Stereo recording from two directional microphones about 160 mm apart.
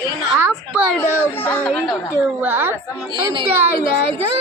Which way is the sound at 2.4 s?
15° right (ahead or behind).